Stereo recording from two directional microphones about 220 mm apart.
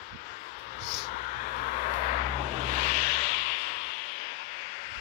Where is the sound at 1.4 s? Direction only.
40° left (ahead or behind).